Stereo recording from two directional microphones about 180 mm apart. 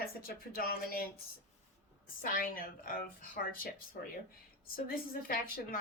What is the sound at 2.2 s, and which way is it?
Speech, 55° left (ahead or behind).